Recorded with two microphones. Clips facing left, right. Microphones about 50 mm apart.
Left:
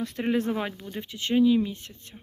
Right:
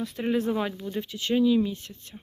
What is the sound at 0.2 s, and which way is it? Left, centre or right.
Speech, left.